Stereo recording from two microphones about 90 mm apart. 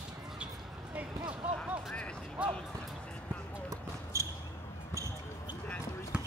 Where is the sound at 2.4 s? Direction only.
15° right (ahead or behind).